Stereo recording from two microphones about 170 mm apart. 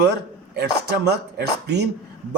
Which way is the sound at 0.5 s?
80° right.